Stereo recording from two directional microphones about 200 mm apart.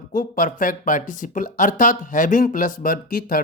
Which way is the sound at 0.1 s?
45° left (ahead or behind).